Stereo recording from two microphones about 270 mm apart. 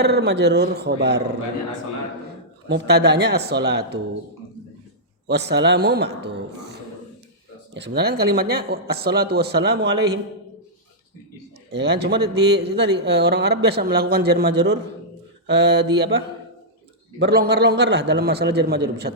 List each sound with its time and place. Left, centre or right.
0.0 s speech: right
2.6 s speech: right
5.3 s speech: right
11.7 s speech: right
17.2 s speech: right